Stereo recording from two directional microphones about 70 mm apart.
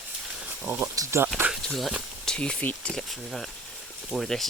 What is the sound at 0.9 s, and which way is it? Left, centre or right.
Speech, right.